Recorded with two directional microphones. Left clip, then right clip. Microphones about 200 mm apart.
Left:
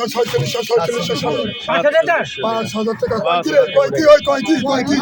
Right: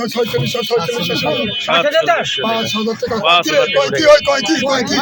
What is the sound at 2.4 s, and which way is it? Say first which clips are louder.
Speech: right 2 dB; 35° left (ahead or behind).